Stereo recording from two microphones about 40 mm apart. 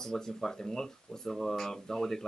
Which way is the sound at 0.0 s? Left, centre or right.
Centre.